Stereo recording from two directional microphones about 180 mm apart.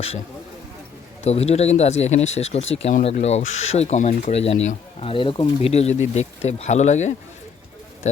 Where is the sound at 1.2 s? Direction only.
35° left (ahead or behind).